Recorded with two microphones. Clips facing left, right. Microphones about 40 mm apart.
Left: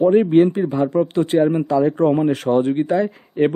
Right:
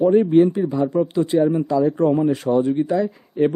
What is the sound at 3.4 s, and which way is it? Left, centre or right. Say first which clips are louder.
Speech: left 1 dB; left.